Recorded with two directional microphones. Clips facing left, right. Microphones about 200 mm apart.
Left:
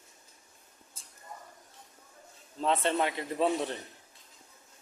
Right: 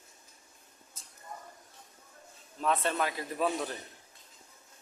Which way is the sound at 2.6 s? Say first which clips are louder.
Left 2 dB; 25° left (ahead or behind).